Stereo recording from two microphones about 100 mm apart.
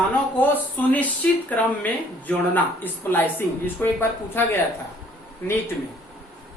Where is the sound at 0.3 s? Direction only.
20° left (ahead or behind).